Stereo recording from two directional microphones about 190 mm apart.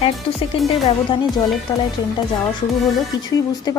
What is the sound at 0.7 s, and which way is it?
Speech, 25° left (ahead or behind).